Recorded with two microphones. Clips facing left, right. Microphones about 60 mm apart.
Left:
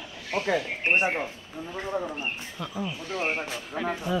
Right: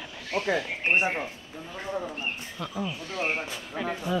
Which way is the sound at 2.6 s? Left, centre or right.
Centre.